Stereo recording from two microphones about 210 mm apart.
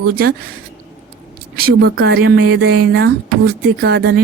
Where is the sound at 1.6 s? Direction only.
45° right (ahead or behind).